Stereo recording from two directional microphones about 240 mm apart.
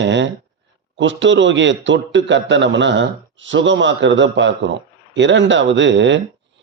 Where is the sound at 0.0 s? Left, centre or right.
Right.